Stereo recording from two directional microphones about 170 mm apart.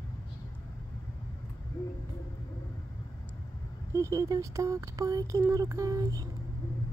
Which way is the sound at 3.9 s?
15° right (ahead or behind).